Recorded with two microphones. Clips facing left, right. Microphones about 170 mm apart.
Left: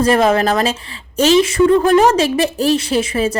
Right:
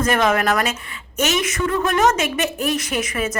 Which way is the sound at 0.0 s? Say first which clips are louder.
Left 5 dB; 30° left (ahead or behind).